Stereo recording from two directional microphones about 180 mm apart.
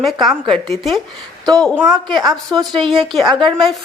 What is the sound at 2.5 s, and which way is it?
Speech, 25° right (ahead or behind).